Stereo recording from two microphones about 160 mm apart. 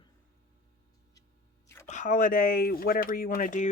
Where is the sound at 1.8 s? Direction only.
50° left (ahead or behind).